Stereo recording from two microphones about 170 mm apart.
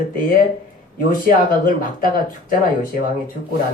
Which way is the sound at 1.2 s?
55° left (ahead or behind).